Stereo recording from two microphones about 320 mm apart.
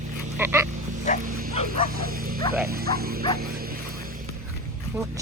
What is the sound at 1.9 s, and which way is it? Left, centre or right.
Speech, right.